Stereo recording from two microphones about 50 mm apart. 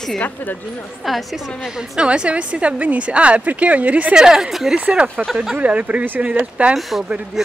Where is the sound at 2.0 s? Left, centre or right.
Right.